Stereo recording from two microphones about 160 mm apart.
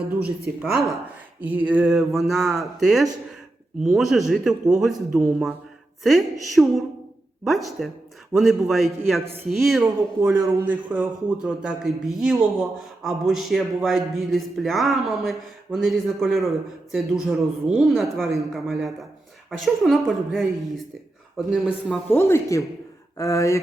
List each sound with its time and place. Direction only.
0.6 s a man's voice: centre (ahead or behind)
22.1 s speech: 20° left (ahead or behind)